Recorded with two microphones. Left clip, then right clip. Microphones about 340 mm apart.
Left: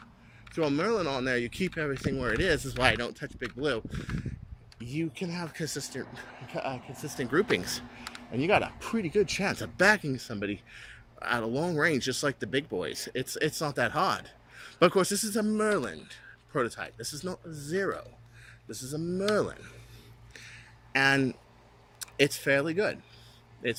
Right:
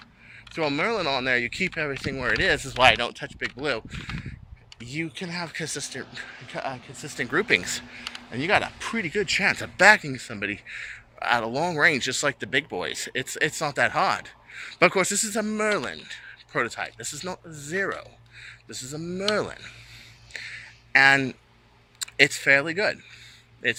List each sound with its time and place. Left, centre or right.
0.5 s speech: centre
4.9 s speech: centre
20.3 s a sound: centre
21.9 s speech: centre